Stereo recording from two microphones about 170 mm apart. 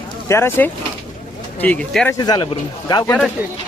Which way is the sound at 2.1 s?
25° left (ahead or behind).